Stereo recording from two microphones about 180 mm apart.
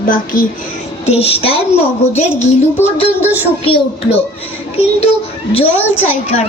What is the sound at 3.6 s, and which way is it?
Child singing, 30° left (ahead or behind).